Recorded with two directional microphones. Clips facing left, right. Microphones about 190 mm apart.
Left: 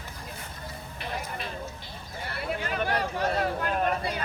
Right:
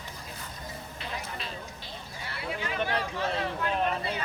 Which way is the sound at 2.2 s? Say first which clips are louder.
Left 3 dB; 50° left (ahead or behind).